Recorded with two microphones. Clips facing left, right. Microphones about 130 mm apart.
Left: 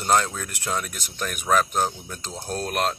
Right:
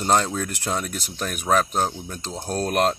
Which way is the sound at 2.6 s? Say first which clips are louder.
Right 5 dB; 40° right (ahead or behind).